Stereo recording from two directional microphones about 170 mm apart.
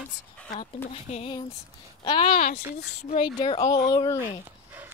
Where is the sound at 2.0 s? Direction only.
30° left (ahead or behind).